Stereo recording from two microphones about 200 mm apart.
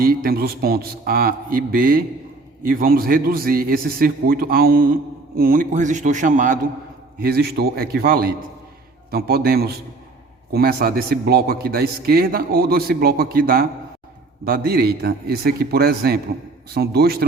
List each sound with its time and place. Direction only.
0.0 s a man's voice: 45° right (ahead or behind)
7.2 s a man's voice: 50° right (ahead or behind)